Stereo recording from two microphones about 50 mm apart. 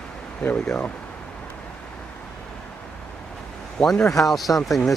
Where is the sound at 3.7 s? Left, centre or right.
Centre.